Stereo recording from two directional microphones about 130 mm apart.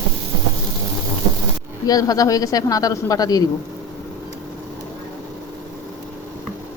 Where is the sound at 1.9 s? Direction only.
30° left (ahead or behind).